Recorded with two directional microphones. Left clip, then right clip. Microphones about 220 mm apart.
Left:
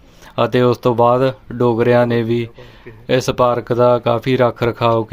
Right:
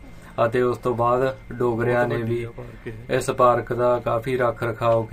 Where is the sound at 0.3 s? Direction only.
40° left (ahead or behind).